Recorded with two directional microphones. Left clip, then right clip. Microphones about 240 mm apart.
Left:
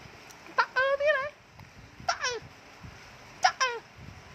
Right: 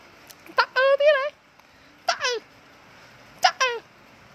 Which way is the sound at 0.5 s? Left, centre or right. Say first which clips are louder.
Right 6 dB; right.